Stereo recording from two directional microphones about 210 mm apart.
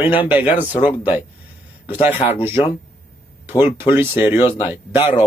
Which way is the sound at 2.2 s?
30° left (ahead or behind).